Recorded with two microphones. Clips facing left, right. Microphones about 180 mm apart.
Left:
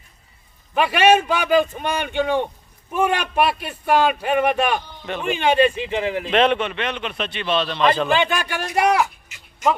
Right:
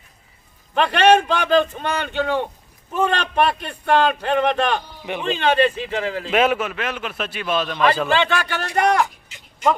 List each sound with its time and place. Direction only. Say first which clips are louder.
0.7 s a man's voice: right 1 dB; 10° left (ahead or behind)
6.3 s a man's voice: even; 5° right (ahead or behind)
8.1 s a man's voice: even; 15° left (ahead or behind)